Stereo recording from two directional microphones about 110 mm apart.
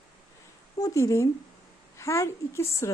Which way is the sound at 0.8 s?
30° left (ahead or behind).